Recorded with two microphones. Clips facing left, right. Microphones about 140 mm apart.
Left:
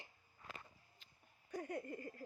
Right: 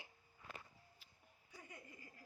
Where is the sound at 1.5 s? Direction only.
55° left (ahead or behind).